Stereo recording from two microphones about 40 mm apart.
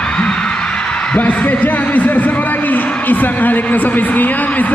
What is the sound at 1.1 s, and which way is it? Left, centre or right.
A man's voice, left.